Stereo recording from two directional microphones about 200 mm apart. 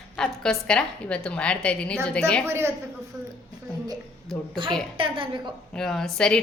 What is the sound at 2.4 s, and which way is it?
Speech, 10° right (ahead or behind).